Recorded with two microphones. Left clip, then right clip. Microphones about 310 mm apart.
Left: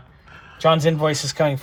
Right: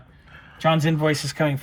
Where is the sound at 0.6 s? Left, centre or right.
Left.